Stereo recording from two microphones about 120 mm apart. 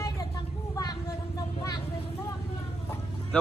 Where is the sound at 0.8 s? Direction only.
30° left (ahead or behind).